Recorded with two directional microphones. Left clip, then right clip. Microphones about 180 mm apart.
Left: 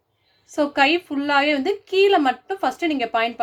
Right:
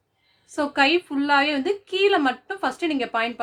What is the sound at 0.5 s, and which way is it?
A woman's voice, 20° left (ahead or behind).